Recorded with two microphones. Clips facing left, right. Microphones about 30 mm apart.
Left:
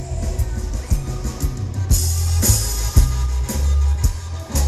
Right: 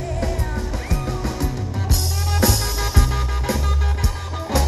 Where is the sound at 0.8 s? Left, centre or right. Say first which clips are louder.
Right 3 dB; right.